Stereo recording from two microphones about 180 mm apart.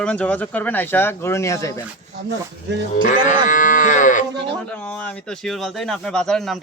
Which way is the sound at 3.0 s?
45° left (ahead or behind).